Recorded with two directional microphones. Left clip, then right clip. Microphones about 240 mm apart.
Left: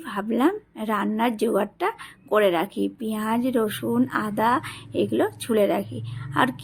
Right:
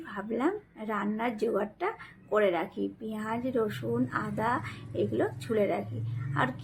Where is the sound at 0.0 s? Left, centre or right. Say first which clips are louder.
Left 8 dB; left.